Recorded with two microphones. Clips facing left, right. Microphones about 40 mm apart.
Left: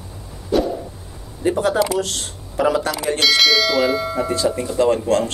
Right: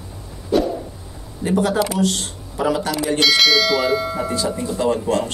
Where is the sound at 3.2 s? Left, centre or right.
Centre.